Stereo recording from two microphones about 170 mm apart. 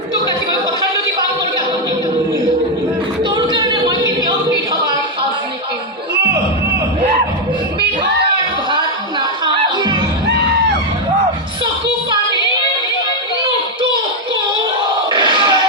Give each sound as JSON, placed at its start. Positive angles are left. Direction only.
{"t": 3.2, "sound": "singing", "side_deg": -30}
{"t": 7.8, "sound": "a sound", "side_deg": -75}
{"t": 9.6, "sound": "music", "side_deg": -30}
{"t": 15.1, "sound": "crowd", "side_deg": -25}